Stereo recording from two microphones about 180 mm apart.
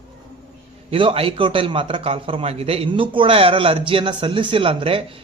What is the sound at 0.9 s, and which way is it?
A man's voice, 30° right (ahead or behind).